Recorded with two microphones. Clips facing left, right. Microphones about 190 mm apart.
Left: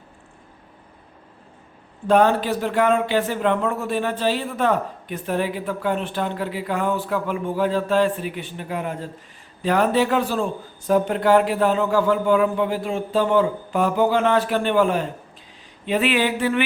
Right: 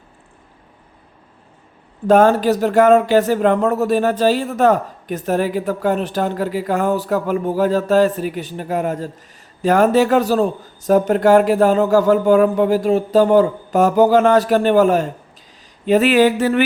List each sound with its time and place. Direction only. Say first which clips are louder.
2.0 s speech: right 5 dB; 45° right (ahead or behind)